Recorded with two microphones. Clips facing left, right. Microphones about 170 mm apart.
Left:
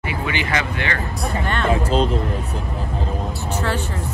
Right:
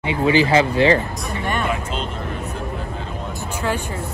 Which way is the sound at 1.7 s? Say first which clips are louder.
Left 7 dB; 35° left (ahead or behind).